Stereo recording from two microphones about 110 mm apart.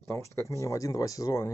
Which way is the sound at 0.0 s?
25° left (ahead or behind).